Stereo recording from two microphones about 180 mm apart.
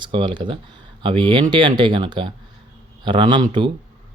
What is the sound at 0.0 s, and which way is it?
Speech, 25° right (ahead or behind).